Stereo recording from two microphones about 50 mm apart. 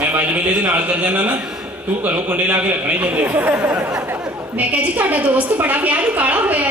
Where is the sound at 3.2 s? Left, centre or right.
Right.